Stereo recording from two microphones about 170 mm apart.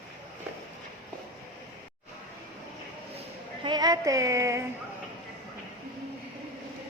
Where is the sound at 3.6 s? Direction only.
25° right (ahead or behind).